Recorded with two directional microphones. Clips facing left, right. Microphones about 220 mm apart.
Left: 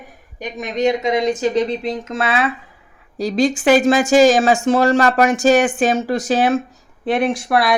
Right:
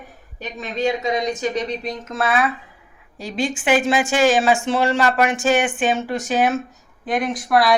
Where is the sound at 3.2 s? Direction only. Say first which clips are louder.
Left 7 dB; 40° left (ahead or behind).